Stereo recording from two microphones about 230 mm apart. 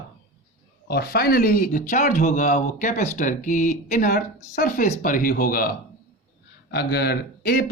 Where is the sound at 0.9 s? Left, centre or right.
Left.